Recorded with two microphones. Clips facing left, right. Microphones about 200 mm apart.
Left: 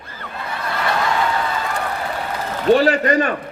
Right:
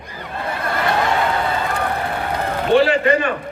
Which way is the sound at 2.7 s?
40° left (ahead or behind).